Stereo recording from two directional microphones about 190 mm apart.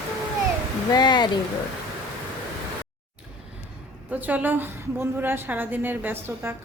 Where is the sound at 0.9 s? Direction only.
20° left (ahead or behind).